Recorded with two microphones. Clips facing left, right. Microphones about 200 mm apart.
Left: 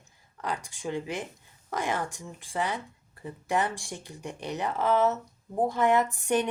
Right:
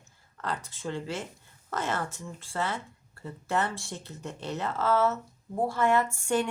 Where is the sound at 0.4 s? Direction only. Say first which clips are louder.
Left 1 dB; 15° left (ahead or behind).